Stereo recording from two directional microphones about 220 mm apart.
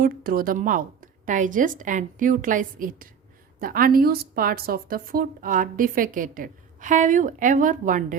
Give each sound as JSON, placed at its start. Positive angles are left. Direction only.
{"t": 0.0, "sound": "a woman's voice", "side_deg": -40}